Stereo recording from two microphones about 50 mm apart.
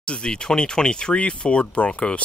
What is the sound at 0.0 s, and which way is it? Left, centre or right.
Speech, centre.